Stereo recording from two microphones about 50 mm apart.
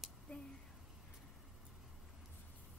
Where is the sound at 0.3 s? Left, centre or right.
Left.